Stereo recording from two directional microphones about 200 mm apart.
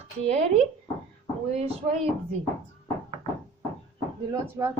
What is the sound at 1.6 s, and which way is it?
Speech, 30° right (ahead or behind).